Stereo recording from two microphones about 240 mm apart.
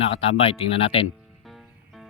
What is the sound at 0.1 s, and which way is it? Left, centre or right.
Speech, left.